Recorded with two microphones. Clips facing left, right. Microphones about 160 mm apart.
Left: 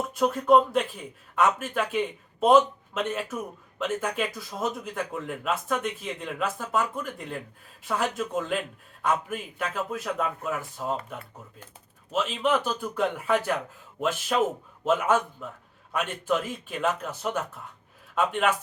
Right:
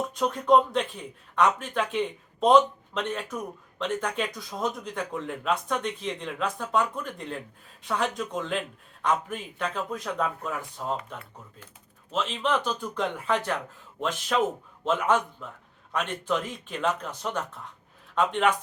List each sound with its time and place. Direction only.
0.1 s speech: 5° left (ahead or behind)
12.1 s a man's voice: 10° left (ahead or behind)
14.8 s a man's voice: 5° left (ahead or behind)